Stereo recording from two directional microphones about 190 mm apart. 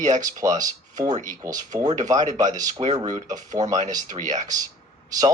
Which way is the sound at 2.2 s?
40° right (ahead or behind).